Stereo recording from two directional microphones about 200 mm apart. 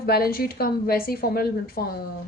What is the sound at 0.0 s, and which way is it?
A woman's voice, 50° left (ahead or behind).